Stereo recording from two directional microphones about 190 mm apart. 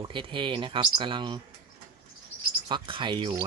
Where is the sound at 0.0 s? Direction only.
25° right (ahead or behind).